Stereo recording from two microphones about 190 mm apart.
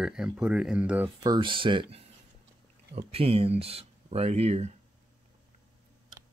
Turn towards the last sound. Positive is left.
turn(degrees=-35)  # may be behind; listen again after turning